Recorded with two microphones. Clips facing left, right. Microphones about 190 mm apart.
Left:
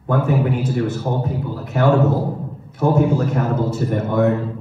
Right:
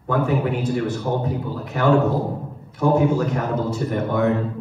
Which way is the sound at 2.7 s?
55° left (ahead or behind).